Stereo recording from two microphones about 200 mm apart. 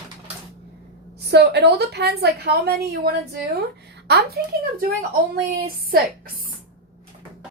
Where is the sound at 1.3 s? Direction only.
55° right (ahead or behind).